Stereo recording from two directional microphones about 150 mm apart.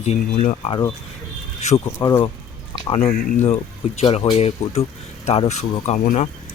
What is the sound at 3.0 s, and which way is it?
Speech, 45° left (ahead or behind).